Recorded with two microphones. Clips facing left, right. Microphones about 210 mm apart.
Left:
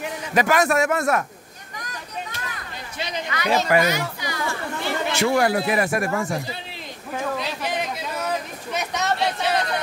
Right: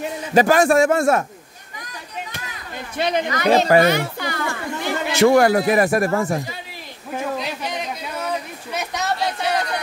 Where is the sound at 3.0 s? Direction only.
55° right (ahead or behind).